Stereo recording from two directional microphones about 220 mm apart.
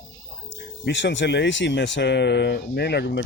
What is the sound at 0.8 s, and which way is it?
Speech, 55° left (ahead or behind).